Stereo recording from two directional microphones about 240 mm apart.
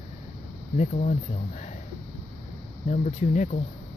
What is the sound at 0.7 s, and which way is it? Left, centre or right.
Speech, left.